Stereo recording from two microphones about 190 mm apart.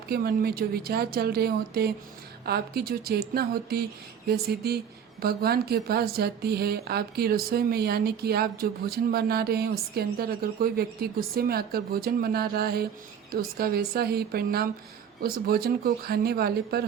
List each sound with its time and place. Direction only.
0.1 s speech: 55° right (ahead or behind)